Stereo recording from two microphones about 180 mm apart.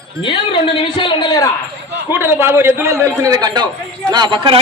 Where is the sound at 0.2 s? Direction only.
30° left (ahead or behind).